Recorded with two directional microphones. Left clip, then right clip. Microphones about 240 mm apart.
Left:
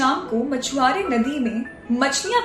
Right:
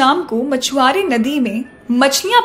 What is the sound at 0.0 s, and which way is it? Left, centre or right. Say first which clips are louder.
A woman's voice: right 7 dB; right.